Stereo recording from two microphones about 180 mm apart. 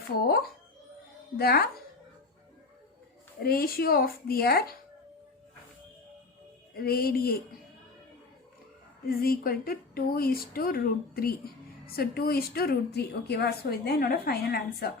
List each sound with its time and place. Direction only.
1.4 s speech: 60° left (ahead or behind)
3.4 s speech: 55° left (ahead or behind)
6.7 s speech: 60° left (ahead or behind)
9.0 s speech: 55° left (ahead or behind)